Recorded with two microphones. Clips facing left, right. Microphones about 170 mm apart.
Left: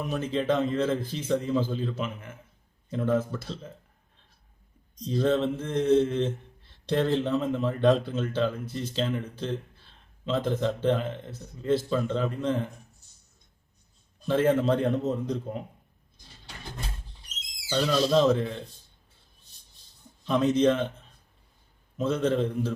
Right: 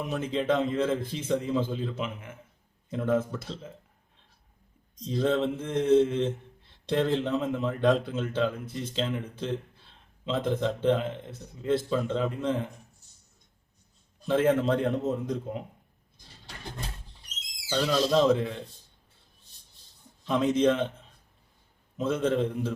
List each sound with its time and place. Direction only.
0.0 s a man's voice: 15° right (ahead or behind)
5.0 s a man's voice: 20° right (ahead or behind)
14.3 s a man's voice: 15° right (ahead or behind)
17.7 s a man's voice: 15° right (ahead or behind)
20.2 s a man's voice: 15° right (ahead or behind)
21.9 s a man's voice: 15° right (ahead or behind)